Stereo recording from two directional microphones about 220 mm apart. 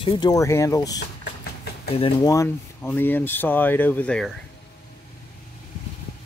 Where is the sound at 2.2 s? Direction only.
15° left (ahead or behind).